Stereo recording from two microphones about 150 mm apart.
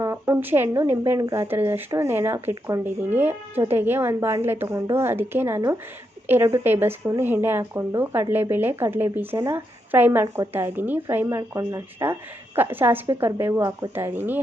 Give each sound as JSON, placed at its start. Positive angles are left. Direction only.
{"t": 0.0, "sound": "speech", "side_deg": -15}
{"t": 13.9, "sound": "speech", "side_deg": -15}